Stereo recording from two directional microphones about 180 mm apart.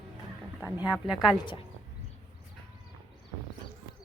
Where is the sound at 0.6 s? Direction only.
10° right (ahead or behind).